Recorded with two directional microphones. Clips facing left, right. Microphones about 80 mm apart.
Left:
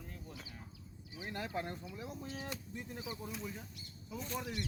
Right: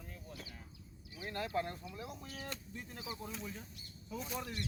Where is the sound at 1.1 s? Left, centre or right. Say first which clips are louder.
Right 2 dB; centre.